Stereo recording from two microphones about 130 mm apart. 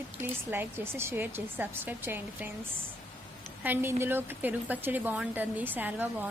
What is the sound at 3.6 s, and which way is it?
A woman's voice, 15° right (ahead or behind).